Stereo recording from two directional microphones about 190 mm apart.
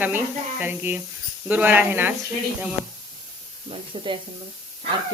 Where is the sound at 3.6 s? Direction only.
30° right (ahead or behind).